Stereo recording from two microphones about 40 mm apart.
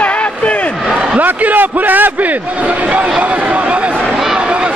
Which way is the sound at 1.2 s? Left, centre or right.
Right.